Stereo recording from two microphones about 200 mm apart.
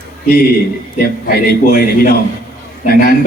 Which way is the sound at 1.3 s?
50° left (ahead or behind).